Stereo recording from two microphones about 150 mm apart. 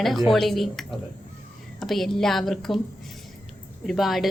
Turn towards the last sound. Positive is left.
turn(degrees=0)  # may be behind; listen again after turning